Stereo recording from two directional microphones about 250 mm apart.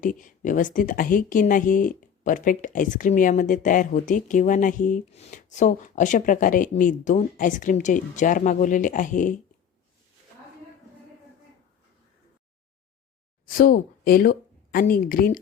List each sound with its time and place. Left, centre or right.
0.0 s a woman's voice: left
13.5 s speech: left